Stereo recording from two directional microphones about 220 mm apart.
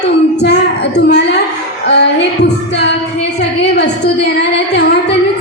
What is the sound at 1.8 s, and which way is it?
Music, 50° left (ahead or behind).